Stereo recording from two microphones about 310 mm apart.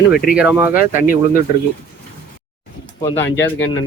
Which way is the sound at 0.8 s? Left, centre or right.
Left.